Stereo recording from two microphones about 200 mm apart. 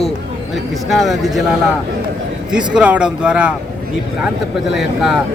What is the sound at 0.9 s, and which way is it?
Speech, centre (ahead or behind).